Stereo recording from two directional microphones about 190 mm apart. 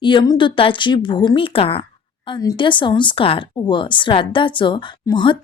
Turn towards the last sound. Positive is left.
turn(degrees=25)  # may be behind; listen again after turning